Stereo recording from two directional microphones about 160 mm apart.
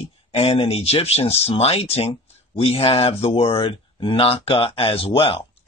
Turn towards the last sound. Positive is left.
turn(degrees=35)  # may be behind; listen again after turning